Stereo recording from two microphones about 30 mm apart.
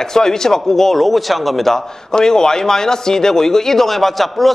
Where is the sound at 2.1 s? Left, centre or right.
Left; by 4.5 s centre.